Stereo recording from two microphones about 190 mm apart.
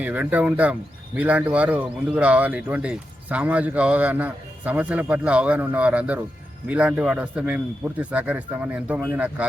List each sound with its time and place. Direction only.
0.0 s speech: 10° right (ahead or behind)